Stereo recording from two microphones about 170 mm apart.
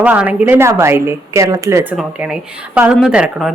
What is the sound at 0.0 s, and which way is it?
Speech, 10° right (ahead or behind).